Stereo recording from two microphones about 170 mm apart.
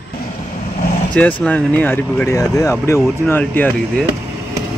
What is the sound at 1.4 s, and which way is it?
Speech, 5° left (ahead or behind).